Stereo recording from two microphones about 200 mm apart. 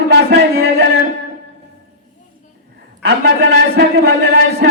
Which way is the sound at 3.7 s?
60° right (ahead or behind).